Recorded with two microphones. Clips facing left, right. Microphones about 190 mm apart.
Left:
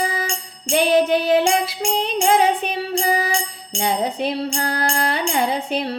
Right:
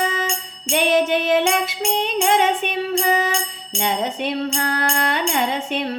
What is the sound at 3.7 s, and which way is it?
Music, 35° left (ahead or behind).